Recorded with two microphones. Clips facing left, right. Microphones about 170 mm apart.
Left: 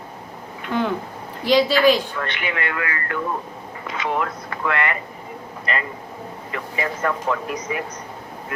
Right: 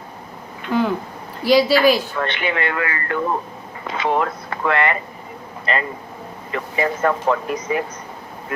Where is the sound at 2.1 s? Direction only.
30° right (ahead or behind).